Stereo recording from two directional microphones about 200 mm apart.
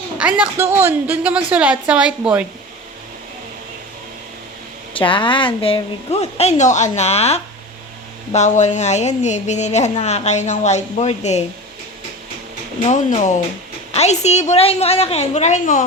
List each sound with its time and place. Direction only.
0.2 s a woman's voice: 5° right (ahead or behind)
4.9 s a woman's voice: 25° left (ahead or behind)
12.8 s a woman's voice: 35° left (ahead or behind)